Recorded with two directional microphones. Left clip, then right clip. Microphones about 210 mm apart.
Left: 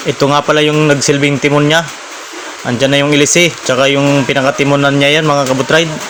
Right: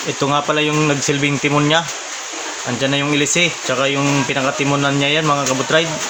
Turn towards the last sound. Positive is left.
turn(degrees=30)  # may be behind; listen again after turning